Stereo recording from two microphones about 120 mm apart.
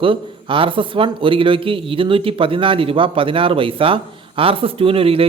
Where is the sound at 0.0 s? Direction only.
45° right (ahead or behind).